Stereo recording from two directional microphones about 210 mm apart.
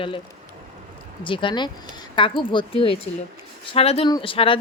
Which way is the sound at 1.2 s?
25° left (ahead or behind).